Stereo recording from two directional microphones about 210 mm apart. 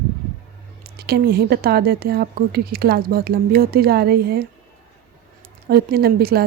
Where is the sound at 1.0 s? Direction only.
50° right (ahead or behind).